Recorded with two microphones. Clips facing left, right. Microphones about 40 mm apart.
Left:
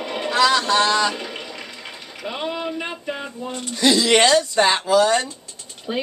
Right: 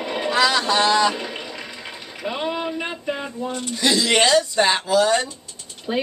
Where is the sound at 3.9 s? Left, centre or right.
Left.